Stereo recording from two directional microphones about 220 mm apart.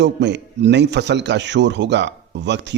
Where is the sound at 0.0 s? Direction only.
50° right (ahead or behind).